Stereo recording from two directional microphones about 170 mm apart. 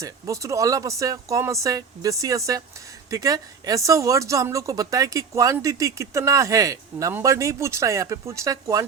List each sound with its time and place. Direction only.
0.0 s speech: 20° right (ahead or behind)